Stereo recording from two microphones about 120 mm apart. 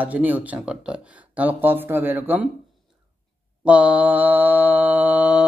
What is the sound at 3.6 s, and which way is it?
Mantra, 10° right (ahead or behind).